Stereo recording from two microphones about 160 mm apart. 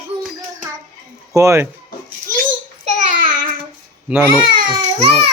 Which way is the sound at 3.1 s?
60° right (ahead or behind).